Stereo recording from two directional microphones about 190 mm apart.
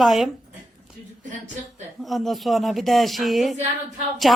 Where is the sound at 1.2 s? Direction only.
40° right (ahead or behind).